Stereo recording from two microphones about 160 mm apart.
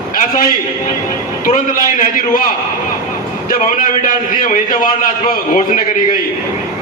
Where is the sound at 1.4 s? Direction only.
55° left (ahead or behind).